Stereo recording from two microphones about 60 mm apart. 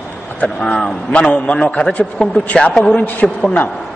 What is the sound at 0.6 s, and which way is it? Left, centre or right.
Speech, centre.